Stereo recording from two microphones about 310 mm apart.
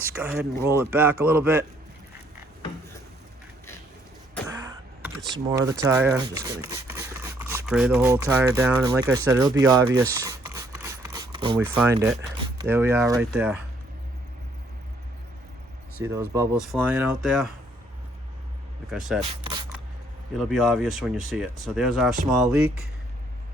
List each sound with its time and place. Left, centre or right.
0.0 s speech: centre
4.4 s throat clearing: centre
5.3 s speech: centre
16.0 s speech: centre
18.9 s speech: centre
19.2 s a sound: centre
20.3 s speech: centre